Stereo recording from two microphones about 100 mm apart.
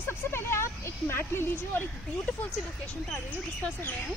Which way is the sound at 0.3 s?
25° left (ahead or behind).